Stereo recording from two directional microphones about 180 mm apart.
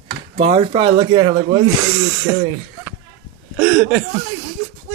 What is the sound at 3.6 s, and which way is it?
Speech, 5° right (ahead or behind).